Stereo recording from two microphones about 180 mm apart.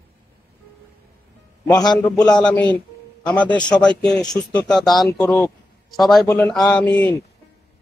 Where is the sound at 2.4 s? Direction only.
5° left (ahead or behind).